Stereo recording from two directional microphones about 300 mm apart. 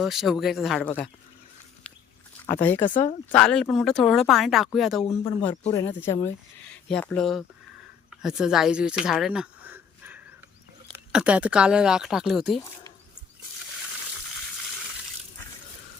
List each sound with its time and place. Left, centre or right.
0.0 s speech: centre
2.5 s speech: centre
2.9 s speech: left
3.3 s speech: centre